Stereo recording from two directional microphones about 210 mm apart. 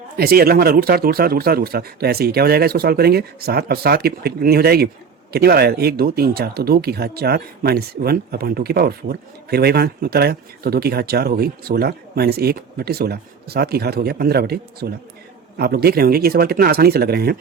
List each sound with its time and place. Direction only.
0.2 s speech: 45° right (ahead or behind)